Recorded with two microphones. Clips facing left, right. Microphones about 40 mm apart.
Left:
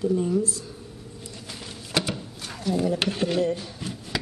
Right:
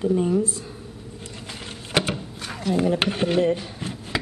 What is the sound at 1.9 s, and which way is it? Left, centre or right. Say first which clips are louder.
Drawer open or close: right 3 dB; right.